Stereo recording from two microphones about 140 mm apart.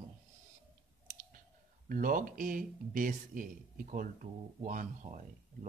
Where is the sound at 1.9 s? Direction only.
75° right (ahead or behind).